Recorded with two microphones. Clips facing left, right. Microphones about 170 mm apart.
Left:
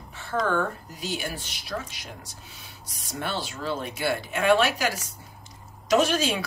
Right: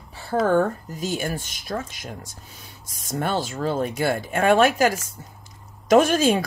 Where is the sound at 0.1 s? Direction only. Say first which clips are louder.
Right 5 dB; 35° right (ahead or behind).